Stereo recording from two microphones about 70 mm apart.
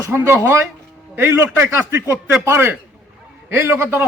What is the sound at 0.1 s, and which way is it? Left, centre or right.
A man's voice, right.